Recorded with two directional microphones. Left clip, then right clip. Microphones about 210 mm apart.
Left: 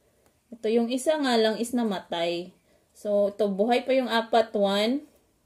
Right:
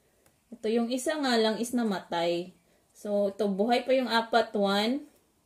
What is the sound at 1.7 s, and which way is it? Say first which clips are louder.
Speech: left 2 dB; 5° right (ahead or behind).